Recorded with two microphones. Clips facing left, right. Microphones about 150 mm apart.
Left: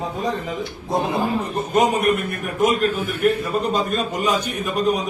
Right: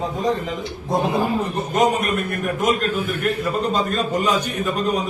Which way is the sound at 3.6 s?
10° left (ahead or behind).